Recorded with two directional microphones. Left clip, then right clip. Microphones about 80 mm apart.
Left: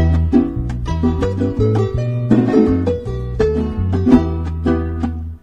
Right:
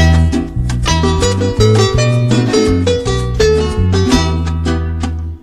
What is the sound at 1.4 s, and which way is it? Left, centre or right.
Salsa music, left.